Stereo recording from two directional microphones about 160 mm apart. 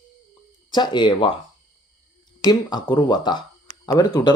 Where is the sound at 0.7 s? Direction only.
30° left (ahead or behind).